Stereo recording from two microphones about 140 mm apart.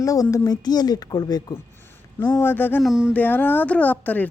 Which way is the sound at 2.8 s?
5° right (ahead or behind).